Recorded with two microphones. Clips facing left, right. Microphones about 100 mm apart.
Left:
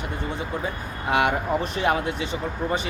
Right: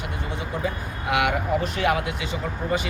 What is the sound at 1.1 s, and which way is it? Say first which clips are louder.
A man's voice: left 1 dB; 30° left (ahead or behind).